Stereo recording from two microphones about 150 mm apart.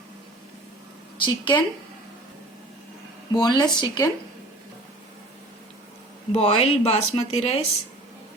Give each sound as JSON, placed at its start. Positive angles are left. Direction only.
{"t": 1.2, "sound": "speech", "side_deg": 30}
{"t": 3.3, "sound": "speech", "side_deg": 30}
{"t": 6.3, "sound": "speech", "side_deg": 40}